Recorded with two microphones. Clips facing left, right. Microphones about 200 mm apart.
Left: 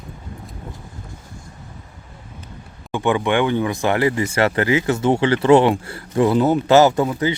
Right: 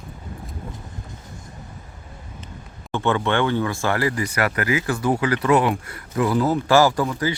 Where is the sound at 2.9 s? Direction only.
15° left (ahead or behind).